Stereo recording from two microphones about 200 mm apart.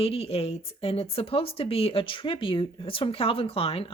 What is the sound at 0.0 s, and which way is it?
Speech, 30° left (ahead or behind).